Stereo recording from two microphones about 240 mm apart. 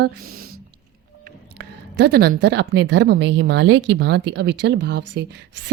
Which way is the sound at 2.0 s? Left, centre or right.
Right.